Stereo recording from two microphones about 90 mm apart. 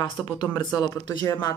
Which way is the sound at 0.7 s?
45° left (ahead or behind).